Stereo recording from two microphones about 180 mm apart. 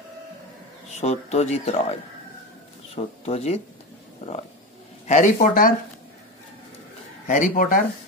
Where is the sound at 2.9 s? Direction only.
35° left (ahead or behind).